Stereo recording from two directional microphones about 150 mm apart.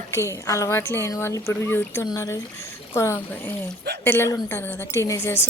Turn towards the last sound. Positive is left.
turn(degrees=20)  # may be behind; listen again after turning